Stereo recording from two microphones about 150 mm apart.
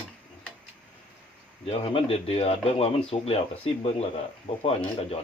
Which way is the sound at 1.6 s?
40° left (ahead or behind).